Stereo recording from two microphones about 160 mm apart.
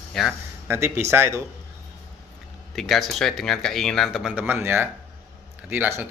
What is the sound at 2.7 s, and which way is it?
Speech, centre (ahead or behind).